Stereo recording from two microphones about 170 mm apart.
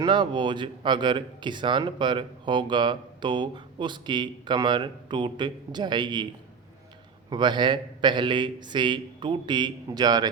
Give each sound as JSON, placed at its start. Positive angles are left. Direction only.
{"t": 0.0, "sound": "speech", "side_deg": -25}
{"t": 7.3, "sound": "speech", "side_deg": -25}